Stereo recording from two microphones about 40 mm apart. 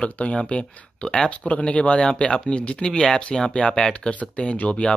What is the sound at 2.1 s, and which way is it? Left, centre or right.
Speech, centre.